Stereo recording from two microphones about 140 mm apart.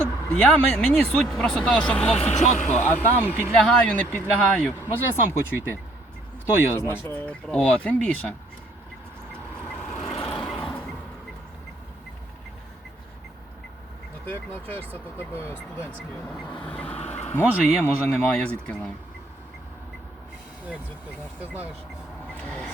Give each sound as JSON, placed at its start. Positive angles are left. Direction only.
{"t": 0.0, "sound": "speech", "side_deg": 10}
{"t": 2.3, "sound": "speech", "side_deg": 55}
{"t": 2.7, "sound": "speech", "side_deg": 10}
{"t": 9.7, "sound": "vehicle", "side_deg": 5}
{"t": 10.2, "sound": "a sound", "side_deg": 5}
{"t": 14.3, "sound": "speech", "side_deg": 15}
{"t": 16.6, "sound": "vehicle", "side_deg": 10}
{"t": 17.4, "sound": "speech", "side_deg": -10}
{"t": 17.8, "sound": "speech", "side_deg": 10}
{"t": 22.3, "sound": "vehicle", "side_deg": 10}